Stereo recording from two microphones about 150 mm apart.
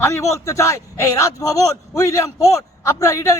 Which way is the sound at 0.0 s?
20° left (ahead or behind).